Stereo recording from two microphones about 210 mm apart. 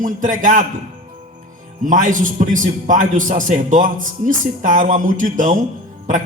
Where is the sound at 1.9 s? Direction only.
40° right (ahead or behind).